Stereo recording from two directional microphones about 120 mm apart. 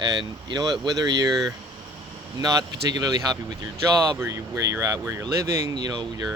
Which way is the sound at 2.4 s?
30° right (ahead or behind).